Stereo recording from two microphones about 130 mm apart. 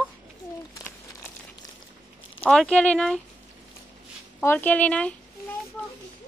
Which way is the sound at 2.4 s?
5° left (ahead or behind).